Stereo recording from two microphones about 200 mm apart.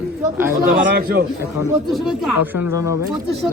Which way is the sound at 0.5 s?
45° right (ahead or behind).